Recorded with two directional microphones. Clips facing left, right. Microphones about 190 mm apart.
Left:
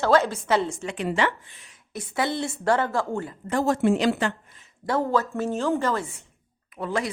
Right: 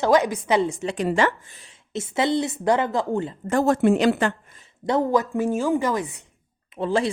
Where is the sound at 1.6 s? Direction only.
25° right (ahead or behind).